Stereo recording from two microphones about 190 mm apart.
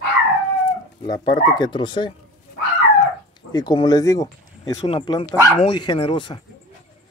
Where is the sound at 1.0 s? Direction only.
25° left (ahead or behind).